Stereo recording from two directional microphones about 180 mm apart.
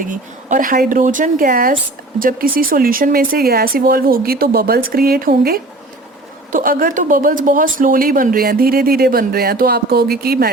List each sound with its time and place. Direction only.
0.0 s speech: 45° right (ahead or behind)